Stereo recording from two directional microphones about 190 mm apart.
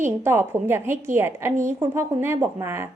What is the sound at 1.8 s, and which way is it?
A woman's voice, 15° right (ahead or behind).